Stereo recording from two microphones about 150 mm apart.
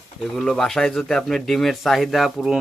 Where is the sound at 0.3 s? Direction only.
5° left (ahead or behind).